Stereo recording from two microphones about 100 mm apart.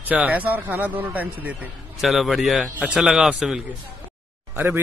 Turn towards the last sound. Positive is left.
turn(degrees=-20)  # may be behind; listen again after turning